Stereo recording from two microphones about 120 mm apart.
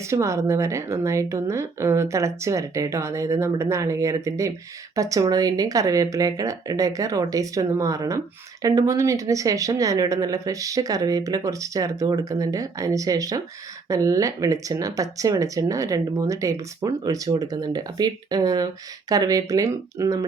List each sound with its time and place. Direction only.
0.1 s speech: 25° right (ahead or behind)